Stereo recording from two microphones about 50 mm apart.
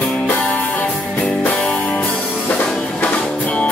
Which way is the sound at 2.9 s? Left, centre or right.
Left.